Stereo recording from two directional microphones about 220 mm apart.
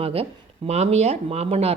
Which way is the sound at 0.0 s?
25° right (ahead or behind).